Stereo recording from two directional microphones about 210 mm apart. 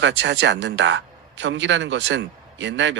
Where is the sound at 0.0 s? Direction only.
60° right (ahead or behind).